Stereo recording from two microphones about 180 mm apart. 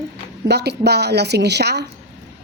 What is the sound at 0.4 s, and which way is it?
Speech, 65° right (ahead or behind).